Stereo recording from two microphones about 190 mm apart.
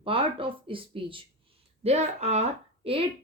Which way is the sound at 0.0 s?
30° right (ahead or behind).